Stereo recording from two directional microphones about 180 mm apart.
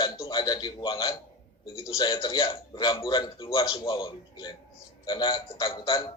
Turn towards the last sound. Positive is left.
turn(degrees=25)  # may be behind; listen again after turning